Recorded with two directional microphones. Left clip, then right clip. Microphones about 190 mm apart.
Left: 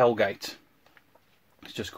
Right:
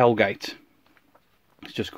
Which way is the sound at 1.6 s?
35° right (ahead or behind).